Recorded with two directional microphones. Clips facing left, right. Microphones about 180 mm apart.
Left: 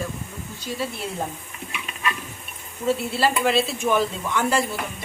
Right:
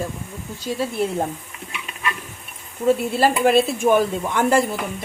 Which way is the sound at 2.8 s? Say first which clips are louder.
Right 4 dB; 50° right (ahead or behind).